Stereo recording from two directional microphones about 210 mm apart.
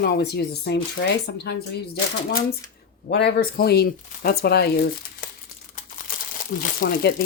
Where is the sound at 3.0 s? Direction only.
50° left (ahead or behind).